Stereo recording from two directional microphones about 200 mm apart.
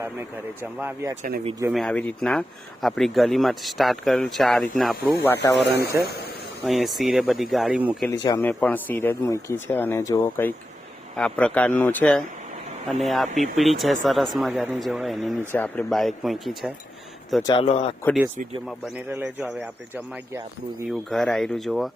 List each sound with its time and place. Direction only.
0.0 s speech: 10° right (ahead or behind)
1.7 s speech: 5° left (ahead or behind)
5.2 s speech: 10° left (ahead or behind)
5.5 s speech: 55° left (ahead or behind)
6.7 s speech: centre (ahead or behind)
8.1 s speech: 20° left (ahead or behind); by 16.7 s centre (ahead or behind)
17.4 s speech: 25° left (ahead or behind)
18.9 s speech: 5° right (ahead or behind)
21.1 s speech: centre (ahead or behind)